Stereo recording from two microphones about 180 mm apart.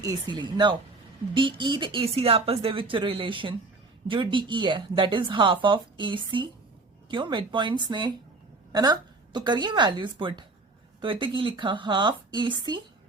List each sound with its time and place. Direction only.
0.0 s speech: 20° right (ahead or behind)